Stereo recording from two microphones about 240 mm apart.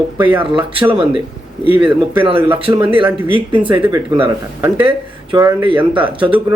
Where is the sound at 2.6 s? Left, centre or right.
Right.